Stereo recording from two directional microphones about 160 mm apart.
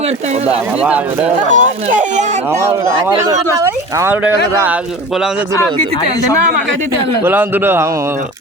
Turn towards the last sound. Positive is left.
turn(degrees=-15)  # may be behind; listen again after turning